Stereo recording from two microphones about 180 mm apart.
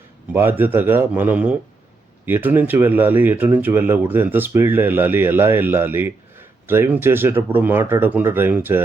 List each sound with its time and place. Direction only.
0.3 s speech: 10° right (ahead or behind)